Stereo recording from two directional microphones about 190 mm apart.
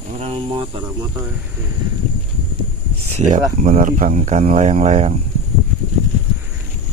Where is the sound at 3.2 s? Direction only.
40° right (ahead or behind).